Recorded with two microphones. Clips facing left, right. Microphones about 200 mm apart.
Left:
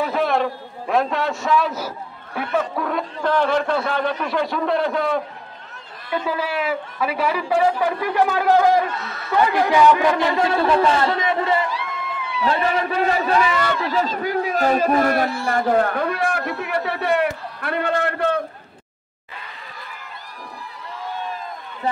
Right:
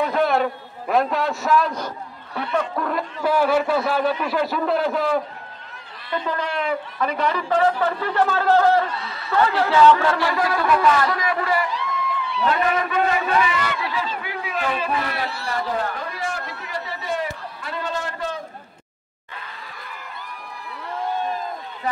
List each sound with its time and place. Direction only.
0.0 s a man's voice: centre (ahead or behind); by 18.4 s 60° left (ahead or behind)